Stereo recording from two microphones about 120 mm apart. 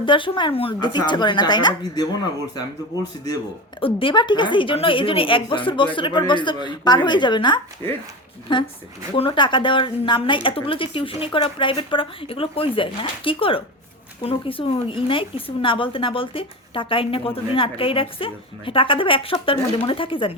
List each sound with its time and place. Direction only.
0.0 s a woman's voice: 45° left (ahead or behind)
3.8 s a woman's voice: 45° left (ahead or behind)